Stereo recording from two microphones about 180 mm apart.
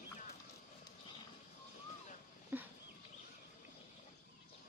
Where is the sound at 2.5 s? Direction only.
10° right (ahead or behind).